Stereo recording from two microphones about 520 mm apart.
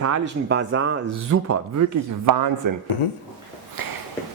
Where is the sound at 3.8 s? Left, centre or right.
Right.